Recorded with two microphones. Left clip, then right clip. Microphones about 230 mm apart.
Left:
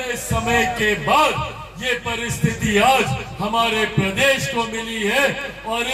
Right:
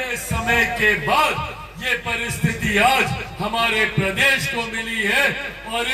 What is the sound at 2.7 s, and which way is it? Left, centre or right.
A man's voice, left.